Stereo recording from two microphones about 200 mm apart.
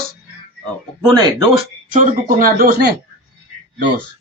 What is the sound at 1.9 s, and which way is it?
Speech, 40° right (ahead or behind).